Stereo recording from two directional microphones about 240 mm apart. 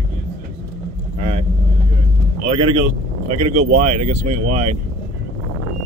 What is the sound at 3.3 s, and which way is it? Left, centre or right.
Speech, right.